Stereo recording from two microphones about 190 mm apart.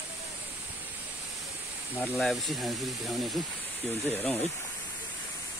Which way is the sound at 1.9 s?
15° left (ahead or behind).